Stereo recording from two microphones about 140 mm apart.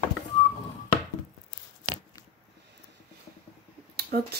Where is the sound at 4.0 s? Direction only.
90° right.